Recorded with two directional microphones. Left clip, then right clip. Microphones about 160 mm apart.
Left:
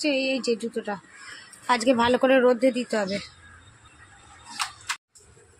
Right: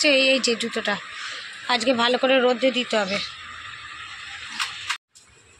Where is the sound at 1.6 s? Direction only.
30° left (ahead or behind).